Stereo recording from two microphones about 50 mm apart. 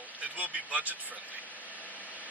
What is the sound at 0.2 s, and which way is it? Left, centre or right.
Speech, right.